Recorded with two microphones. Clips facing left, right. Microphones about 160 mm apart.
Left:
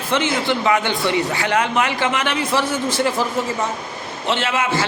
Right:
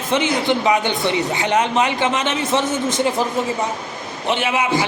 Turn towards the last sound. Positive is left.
turn(degrees=-15)  # may be behind; listen again after turning